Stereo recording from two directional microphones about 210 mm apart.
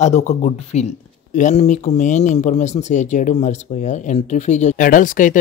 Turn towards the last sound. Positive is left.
turn(degrees=40)  # may be behind; listen again after turning